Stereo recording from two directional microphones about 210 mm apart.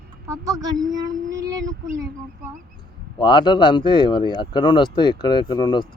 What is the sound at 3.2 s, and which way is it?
Speech, 20° left (ahead or behind).